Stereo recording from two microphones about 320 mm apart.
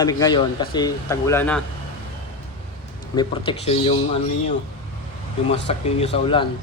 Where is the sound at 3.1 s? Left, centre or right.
Centre.